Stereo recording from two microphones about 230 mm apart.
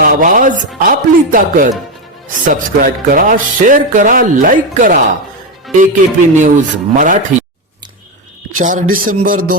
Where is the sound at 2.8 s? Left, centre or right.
Right.